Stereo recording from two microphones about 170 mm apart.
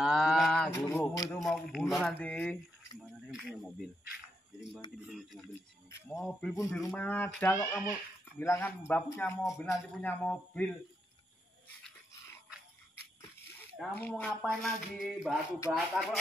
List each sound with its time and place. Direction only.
0.0 s a sound: centre (ahead or behind)
0.7 s music: 15° left (ahead or behind)
1.4 s speech: centre (ahead or behind)
3.2 s speech: 5° right (ahead or behind)
5.0 s speech: centre (ahead or behind)
5.5 s speech: 15° left (ahead or behind)
6.1 s speech: 5° left (ahead or behind)
6.5 s a child's voice: 20° left (ahead or behind)
9.4 s a child's voice: centre (ahead or behind)
13.7 s speech: 10° left (ahead or behind); by 15.8 s 10° right (ahead or behind)